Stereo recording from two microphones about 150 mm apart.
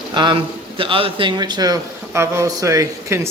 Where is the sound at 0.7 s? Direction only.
35° right (ahead or behind).